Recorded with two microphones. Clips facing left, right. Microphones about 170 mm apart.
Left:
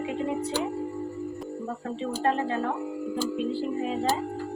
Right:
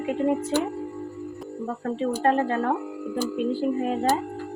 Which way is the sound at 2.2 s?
50° right (ahead or behind).